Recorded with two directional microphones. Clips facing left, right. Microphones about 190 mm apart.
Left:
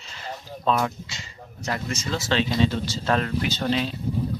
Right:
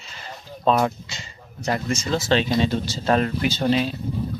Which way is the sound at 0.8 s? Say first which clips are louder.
Right 4 dB; 35° right (ahead or behind).